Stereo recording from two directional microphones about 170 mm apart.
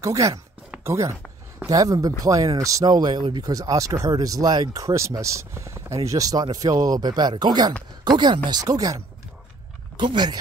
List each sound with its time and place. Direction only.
0.0 s speech: 20° right (ahead or behind)
0.7 s a sound: 15° right (ahead or behind)
1.6 s speech: 20° right (ahead or behind)